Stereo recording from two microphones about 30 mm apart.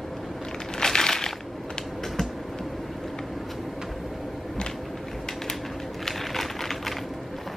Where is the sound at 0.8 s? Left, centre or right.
Left.